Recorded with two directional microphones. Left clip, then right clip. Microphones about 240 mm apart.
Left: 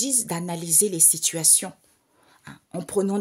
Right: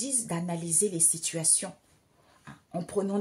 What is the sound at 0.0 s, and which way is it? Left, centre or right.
Speech, left.